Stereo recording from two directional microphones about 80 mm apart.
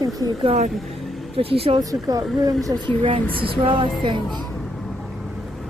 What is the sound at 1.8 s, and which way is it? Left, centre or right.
A woman's voice, right.